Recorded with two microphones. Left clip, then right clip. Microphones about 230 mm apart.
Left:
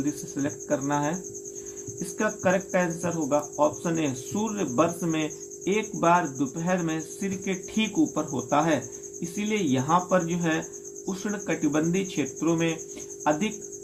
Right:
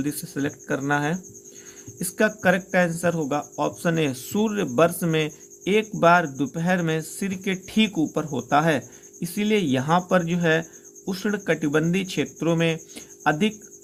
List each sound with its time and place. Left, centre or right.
0.0 s speech: right